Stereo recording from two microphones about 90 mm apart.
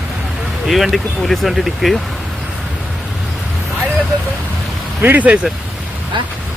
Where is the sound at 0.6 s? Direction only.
Centre (ahead or behind).